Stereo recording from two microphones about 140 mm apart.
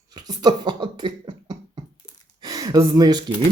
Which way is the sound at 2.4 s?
25° right (ahead or behind).